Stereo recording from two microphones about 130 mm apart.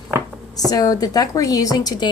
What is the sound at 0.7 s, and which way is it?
A woman's voice, 30° left (ahead or behind).